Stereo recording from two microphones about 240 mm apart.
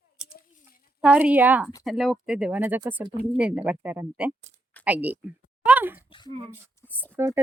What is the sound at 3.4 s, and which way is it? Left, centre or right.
Speech, centre.